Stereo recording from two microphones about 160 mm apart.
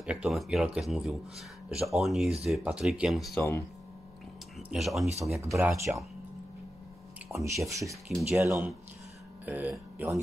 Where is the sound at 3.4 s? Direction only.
20° left (ahead or behind).